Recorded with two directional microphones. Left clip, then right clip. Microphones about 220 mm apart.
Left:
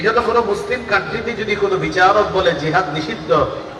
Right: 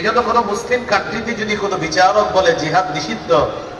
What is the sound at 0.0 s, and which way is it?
A man's voice, 50° right (ahead or behind).